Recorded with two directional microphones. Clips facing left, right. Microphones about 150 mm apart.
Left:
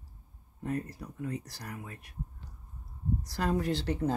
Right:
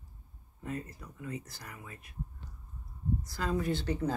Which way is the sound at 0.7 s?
60° left (ahead or behind).